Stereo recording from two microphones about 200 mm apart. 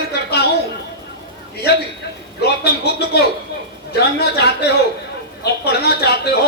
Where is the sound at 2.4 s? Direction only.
55° left (ahead or behind).